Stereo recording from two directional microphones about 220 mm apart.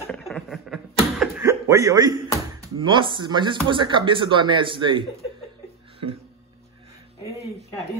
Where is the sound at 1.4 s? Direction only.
15° right (ahead or behind).